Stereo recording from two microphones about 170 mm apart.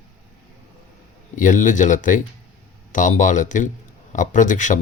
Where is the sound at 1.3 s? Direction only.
50° left (ahead or behind).